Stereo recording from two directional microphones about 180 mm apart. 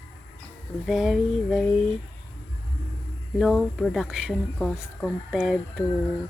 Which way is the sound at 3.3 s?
Centre (ahead or behind).